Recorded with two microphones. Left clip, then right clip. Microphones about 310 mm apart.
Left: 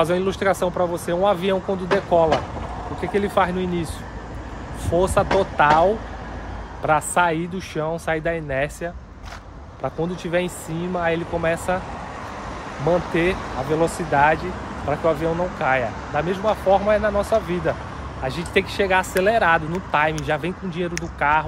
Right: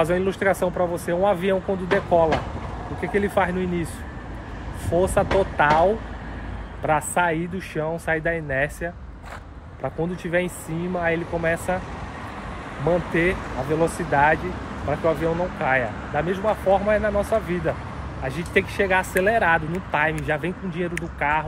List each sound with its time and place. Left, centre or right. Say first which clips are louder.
0.0 s speech: left 1 dB; centre
4.9 s speech: left 1 dB; centre
13.1 s speech: left 1 dB; centre